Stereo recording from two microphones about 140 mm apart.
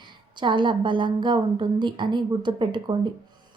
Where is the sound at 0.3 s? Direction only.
35° right (ahead or behind).